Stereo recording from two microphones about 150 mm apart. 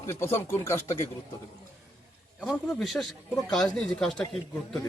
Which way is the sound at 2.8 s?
Centre (ahead or behind).